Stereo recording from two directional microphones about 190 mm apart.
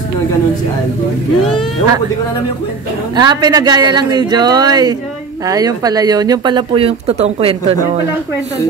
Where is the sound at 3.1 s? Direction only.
20° right (ahead or behind).